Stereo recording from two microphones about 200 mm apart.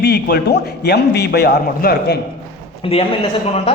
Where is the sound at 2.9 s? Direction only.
30° left (ahead or behind).